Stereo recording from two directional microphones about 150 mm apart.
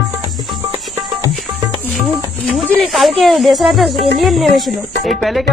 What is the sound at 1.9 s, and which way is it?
Speech, centre (ahead or behind).